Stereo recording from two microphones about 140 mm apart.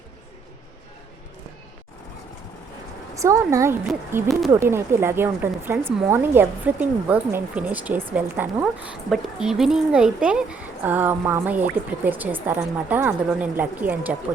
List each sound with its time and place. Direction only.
3.2 s speech: 20° right (ahead or behind)
4.3 s speech: centre (ahead or behind)
4.6 s speech: 20° right (ahead or behind)